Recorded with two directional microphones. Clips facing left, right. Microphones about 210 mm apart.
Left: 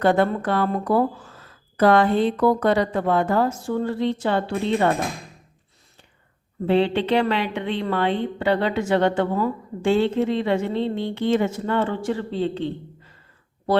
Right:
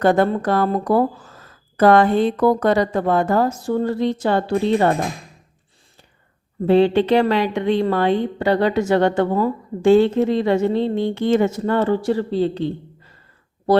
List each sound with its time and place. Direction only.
0.0 s speech: 45° right (ahead or behind)
6.7 s a woman's voice: 40° right (ahead or behind)